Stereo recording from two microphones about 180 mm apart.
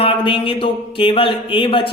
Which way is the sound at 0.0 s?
30° left (ahead or behind).